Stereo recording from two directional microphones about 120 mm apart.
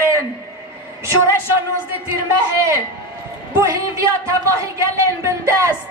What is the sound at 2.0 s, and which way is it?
A man's voice, 25° right (ahead or behind).